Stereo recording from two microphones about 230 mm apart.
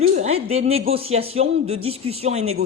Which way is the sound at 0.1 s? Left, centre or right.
Right.